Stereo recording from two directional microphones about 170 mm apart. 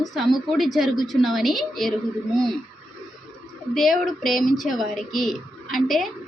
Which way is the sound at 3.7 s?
Centre (ahead or behind).